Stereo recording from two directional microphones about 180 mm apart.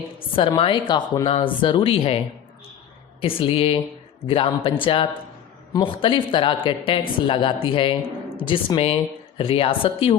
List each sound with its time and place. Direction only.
0.2 s a woman's voice: 30° left (ahead or behind)